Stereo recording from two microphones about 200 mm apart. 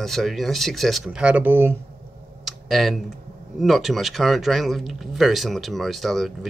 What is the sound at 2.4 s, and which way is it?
Computer keyboard, centre (ahead or behind).